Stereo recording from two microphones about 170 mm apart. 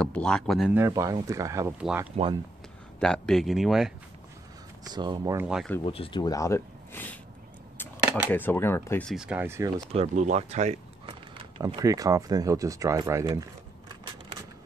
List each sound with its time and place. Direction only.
0.0 s speech: 5° left (ahead or behind)
0.7 s speech: 15° right (ahead or behind)
1.8 s speech: 5° right (ahead or behind)
4.9 s speech: 25° right (ahead or behind)
5.9 s speech: 30° left (ahead or behind); by 9.0 s 15° left (ahead or behind)
9.0 s speech: 5° right (ahead or behind)
9.9 s speech: 40° right (ahead or behind)
11.1 s speech: 25° right (ahead or behind)